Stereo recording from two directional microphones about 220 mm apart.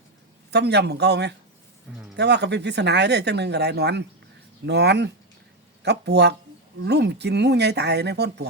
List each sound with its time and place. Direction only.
0.5 s speech: 50° right (ahead or behind)